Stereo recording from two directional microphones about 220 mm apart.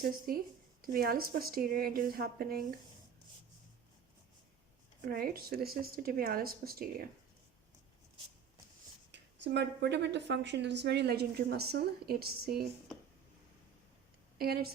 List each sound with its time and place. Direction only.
0.3 s a woman's voice: 40° right (ahead or behind)
5.0 s speech: 40° right (ahead or behind)
9.1 s a woman's voice: 50° right (ahead or behind)
14.3 s a woman's voice: 45° right (ahead or behind)